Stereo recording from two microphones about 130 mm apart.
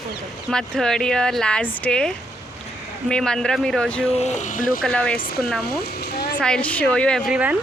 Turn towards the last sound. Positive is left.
turn(degrees=-10)  # may be behind; listen again after turning